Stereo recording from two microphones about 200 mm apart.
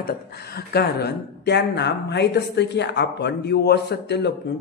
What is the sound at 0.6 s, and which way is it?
A man's voice, 55° left (ahead or behind).